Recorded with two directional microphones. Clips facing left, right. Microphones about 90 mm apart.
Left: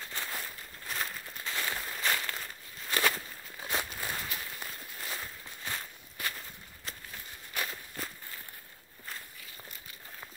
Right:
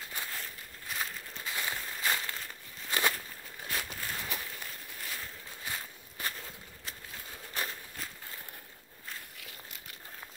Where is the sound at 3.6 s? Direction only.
20° left (ahead or behind).